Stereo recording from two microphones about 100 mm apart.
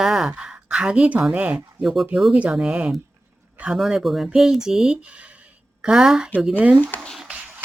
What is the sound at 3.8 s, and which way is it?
Speech, centre (ahead or behind).